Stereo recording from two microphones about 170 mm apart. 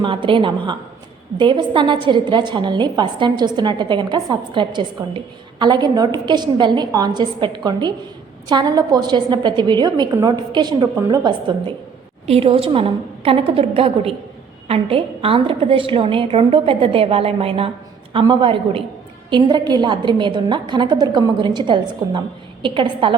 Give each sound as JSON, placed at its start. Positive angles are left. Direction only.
{"t": 0.0, "sound": "a woman's voice", "side_deg": -30}